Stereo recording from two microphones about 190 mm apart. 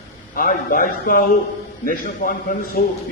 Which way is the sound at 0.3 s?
50° left (ahead or behind).